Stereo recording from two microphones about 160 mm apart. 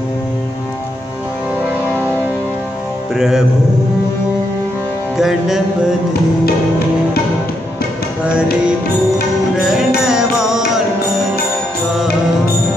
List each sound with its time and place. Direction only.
3.2 s music: 5° right (ahead or behind)
5.1 s music: 5° right (ahead or behind)
9.6 s music: 5° right (ahead or behind)